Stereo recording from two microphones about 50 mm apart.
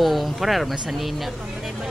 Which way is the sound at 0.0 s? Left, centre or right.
Centre.